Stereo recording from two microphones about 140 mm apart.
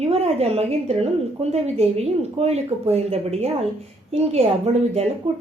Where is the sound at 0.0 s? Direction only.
50° right (ahead or behind).